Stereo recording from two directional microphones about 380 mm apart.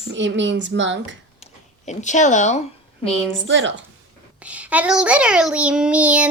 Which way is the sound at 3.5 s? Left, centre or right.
Right.